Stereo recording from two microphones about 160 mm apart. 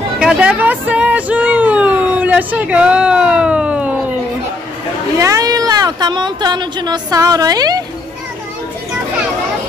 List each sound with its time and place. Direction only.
0.2 s speech: 5° right (ahead or behind)
5.2 s speech: 20° right (ahead or behind)